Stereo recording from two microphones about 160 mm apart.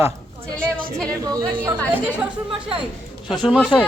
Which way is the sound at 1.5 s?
10° right (ahead or behind).